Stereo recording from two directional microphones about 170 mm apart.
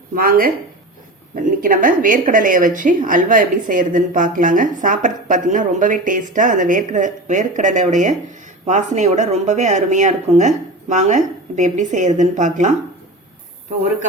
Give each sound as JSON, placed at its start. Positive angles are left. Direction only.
{"t": 0.2, "sound": "a woman's voice", "side_deg": -60}